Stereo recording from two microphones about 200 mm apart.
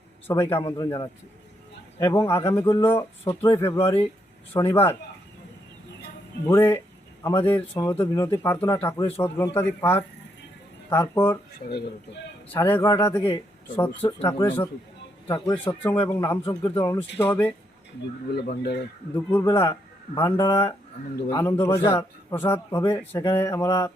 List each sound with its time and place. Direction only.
0.3 s speech: 10° left (ahead or behind)
4.7 s speech: 10° left (ahead or behind)
6.4 s speech: 10° left (ahead or behind)
12.5 s speech: 10° left (ahead or behind)
14.3 s speech: 20° left (ahead or behind)
18.4 s speech: 55° left (ahead or behind)
19.1 s speech: 10° left (ahead or behind)